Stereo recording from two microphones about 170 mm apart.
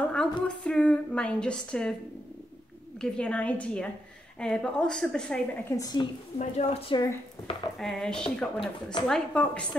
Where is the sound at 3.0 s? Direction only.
5° left (ahead or behind).